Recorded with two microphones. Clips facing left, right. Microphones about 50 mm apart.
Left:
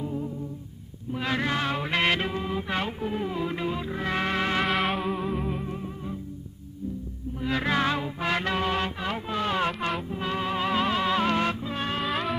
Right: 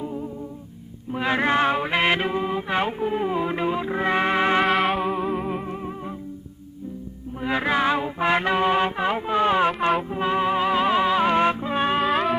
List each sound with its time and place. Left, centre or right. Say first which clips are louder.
0.0 s music: right 1 dB; centre
1.1 s mantra: right 6 dB; right
4.6 s music: right 5 dB; centre; by 6.1 s right
7.4 s music: right 4 dB; centre
10.0 s music: right 7 dB; right
12.0 s music: right 7 dB; centre